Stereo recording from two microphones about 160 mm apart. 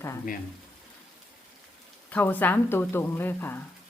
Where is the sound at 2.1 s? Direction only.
10° left (ahead or behind).